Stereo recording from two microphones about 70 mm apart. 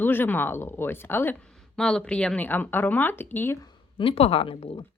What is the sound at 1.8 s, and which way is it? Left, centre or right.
Speech, centre.